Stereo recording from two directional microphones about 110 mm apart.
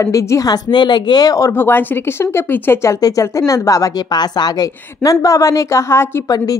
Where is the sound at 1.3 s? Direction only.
25° left (ahead or behind).